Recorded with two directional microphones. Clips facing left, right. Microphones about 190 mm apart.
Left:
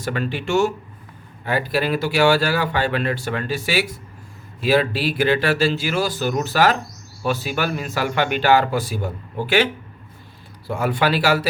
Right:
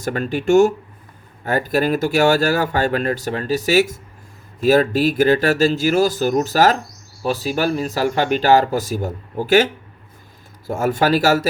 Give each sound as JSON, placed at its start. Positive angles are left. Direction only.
{"t": 0.0, "sound": "speech", "side_deg": -45}
{"t": 10.7, "sound": "speech", "side_deg": -45}